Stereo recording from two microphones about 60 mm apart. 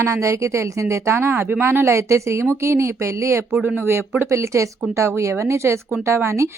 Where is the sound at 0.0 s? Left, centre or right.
Right.